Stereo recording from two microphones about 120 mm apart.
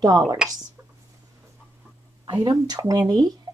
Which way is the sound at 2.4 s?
35° right (ahead or behind).